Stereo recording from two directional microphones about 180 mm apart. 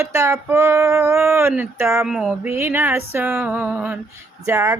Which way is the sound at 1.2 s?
10° right (ahead or behind).